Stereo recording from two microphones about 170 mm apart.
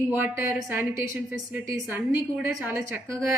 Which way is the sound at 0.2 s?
15° right (ahead or behind).